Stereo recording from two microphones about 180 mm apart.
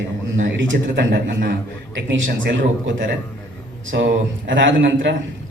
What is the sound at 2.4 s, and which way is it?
A man's voice, 80° right.